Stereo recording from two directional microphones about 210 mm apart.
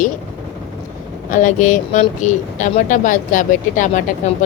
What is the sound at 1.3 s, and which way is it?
Speech, 35° left (ahead or behind).